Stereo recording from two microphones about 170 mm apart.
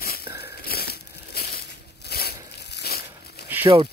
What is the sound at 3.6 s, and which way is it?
Speech, 30° right (ahead or behind).